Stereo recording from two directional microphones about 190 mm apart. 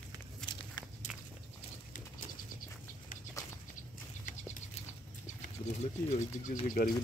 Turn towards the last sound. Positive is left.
turn(degrees=45)  # may be behind; listen again after turning